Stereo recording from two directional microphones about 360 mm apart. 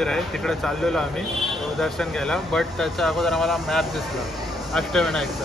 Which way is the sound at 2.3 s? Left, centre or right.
Centre.